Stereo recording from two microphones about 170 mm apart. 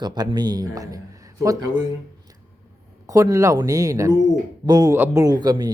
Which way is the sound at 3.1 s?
20° right (ahead or behind).